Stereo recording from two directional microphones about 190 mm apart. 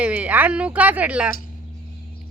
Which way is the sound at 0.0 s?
10° right (ahead or behind).